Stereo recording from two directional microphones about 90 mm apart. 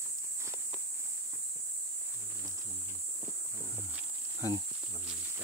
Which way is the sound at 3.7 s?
25° right (ahead or behind).